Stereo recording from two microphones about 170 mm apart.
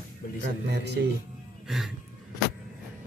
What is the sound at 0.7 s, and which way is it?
Speech, 80° right.